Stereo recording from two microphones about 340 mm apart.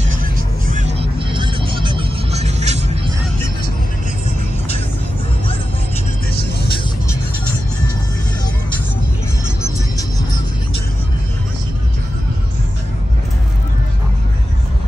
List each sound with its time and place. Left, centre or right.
0.7 s music: right